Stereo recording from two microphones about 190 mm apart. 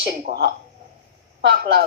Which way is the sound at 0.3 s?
55° right (ahead or behind).